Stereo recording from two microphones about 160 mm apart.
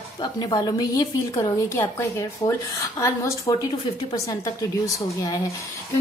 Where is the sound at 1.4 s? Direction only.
20° left (ahead or behind).